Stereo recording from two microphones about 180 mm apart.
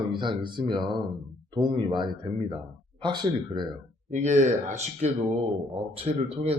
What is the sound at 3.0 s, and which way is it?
Speech, 25° right (ahead or behind).